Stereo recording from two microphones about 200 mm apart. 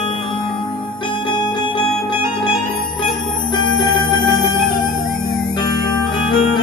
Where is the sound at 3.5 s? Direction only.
20° left (ahead or behind).